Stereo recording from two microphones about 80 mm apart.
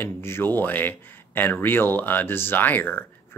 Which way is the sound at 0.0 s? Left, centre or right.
Left.